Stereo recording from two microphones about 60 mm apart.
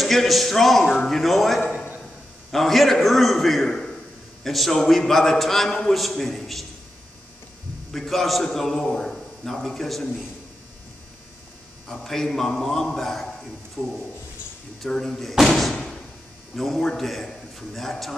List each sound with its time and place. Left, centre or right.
0.0 s a man's voice: centre
7.9 s a man's voice: centre
11.9 s a man's voice: centre
14.8 s a man's voice: centre
15.7 s a sound: centre
16.5 s a man's voice: centre